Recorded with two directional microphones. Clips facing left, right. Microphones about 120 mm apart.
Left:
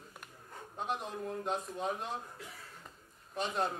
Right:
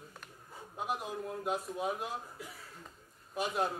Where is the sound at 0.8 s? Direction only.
5° right (ahead or behind).